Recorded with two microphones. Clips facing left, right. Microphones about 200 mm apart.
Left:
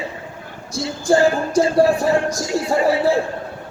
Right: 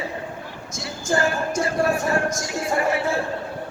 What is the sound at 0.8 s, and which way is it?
Music, 30° left (ahead or behind).